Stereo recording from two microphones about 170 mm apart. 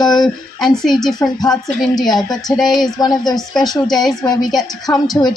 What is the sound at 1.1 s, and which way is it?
Speech, 20° left (ahead or behind).